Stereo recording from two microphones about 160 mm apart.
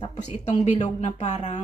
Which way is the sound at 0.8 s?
45° left (ahead or behind).